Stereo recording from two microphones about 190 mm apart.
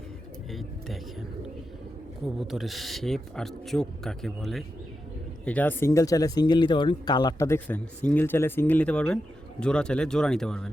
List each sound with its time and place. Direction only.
2.2 s speech: centre (ahead or behind)